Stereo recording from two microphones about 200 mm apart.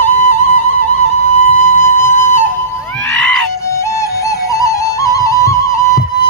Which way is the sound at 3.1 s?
5° left (ahead or behind).